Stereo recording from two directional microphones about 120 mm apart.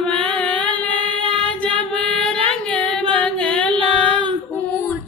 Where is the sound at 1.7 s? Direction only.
10° left (ahead or behind).